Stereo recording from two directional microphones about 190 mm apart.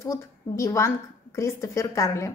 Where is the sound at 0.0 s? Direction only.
15° left (ahead or behind).